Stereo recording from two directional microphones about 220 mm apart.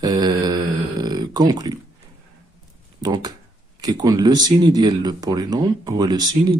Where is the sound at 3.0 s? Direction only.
20° right (ahead or behind).